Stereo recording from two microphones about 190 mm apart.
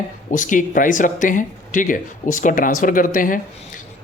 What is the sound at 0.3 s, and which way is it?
A man's voice, 45° left (ahead or behind).